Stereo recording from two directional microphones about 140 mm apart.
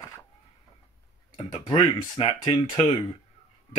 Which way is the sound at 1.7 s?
40° left (ahead or behind).